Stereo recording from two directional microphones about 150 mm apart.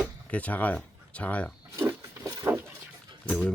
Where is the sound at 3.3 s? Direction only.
10° left (ahead or behind).